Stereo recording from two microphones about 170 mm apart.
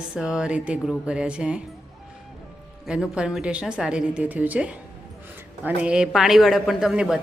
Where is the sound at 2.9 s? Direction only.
5° right (ahead or behind).